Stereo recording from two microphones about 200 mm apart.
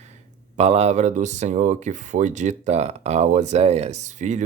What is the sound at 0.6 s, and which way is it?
Speech, 30° right (ahead or behind).